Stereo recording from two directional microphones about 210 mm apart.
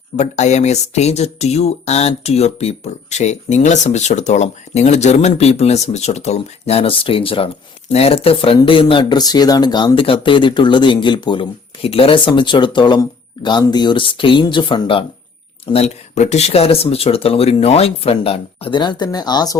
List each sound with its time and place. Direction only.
0.2 s speech: 35° left (ahead or behind)